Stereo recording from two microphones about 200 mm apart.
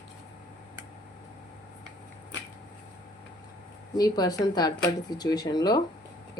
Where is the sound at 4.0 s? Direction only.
20° left (ahead or behind).